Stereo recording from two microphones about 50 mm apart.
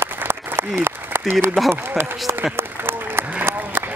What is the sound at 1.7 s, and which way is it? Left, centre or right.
Speech, right.